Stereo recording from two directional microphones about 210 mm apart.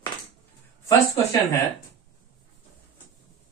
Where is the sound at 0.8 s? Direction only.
15° left (ahead or behind).